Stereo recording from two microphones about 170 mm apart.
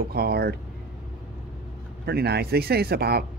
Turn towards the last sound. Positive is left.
turn(degrees=-70)  # may be behind; listen again after turning